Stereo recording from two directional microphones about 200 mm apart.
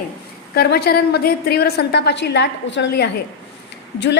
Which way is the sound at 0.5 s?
50° left (ahead or behind).